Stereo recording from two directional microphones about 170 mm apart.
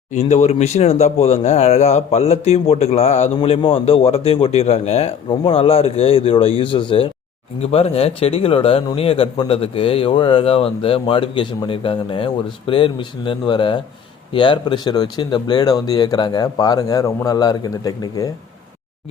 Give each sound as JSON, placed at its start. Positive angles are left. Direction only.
{"t": 0.1, "sound": "a man's voice", "side_deg": 45}